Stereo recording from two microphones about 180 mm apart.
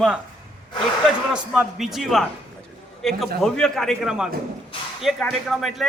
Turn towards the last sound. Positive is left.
turn(degrees=0)  # may be behind; listen again after turning